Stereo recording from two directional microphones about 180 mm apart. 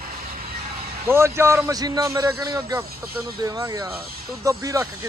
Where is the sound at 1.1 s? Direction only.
15° right (ahead or behind).